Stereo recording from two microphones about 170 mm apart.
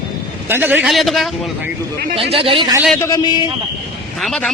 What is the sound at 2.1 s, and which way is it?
Speech, 35° right (ahead or behind).